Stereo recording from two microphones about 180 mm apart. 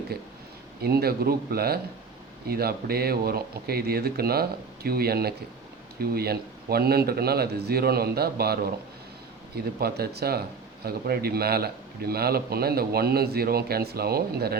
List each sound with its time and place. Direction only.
0.8 s a man's voice: 60° right (ahead or behind)
9.8 s a man's voice: 60° right (ahead or behind)